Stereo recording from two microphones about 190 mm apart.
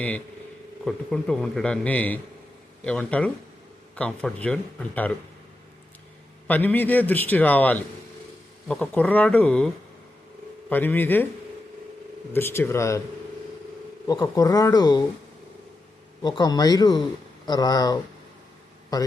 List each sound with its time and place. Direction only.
0.9 s a man's voice: 5° left (ahead or behind)
6.5 s a man's voice: 10° left (ahead or behind)
10.7 s a man's voice: 10° left (ahead or behind)
12.3 s a man's voice: 10° left (ahead or behind)
14.1 s speech: 20° left (ahead or behind)
16.2 s speech: 20° left (ahead or behind)